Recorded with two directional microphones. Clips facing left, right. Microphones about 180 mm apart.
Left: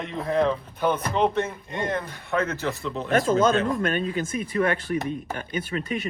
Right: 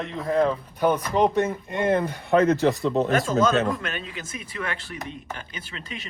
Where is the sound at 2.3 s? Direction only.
35° right (ahead or behind).